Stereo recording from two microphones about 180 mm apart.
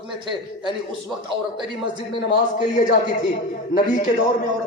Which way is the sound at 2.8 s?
50° left (ahead or behind).